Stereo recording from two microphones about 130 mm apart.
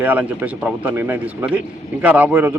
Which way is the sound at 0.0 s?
10° right (ahead or behind).